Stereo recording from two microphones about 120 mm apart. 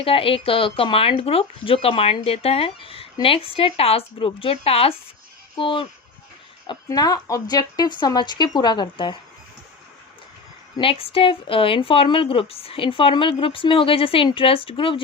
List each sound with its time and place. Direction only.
0.0 s speech: 50° left (ahead or behind)
6.8 s speech: 30° left (ahead or behind)
10.8 s speech: 50° left (ahead or behind)